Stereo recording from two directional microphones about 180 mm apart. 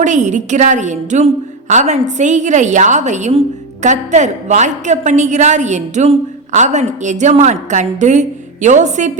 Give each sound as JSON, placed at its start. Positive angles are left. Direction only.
{"t": 0.0, "sound": "a woman's voice", "side_deg": -40}